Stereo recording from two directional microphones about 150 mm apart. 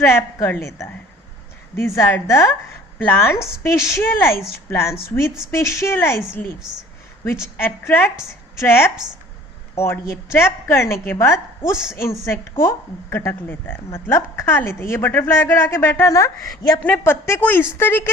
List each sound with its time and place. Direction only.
0.0 s speech: 15° left (ahead or behind)